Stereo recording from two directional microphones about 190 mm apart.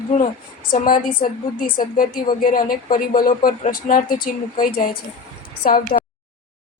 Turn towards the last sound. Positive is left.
turn(degrees=50)  # may be behind; listen again after turning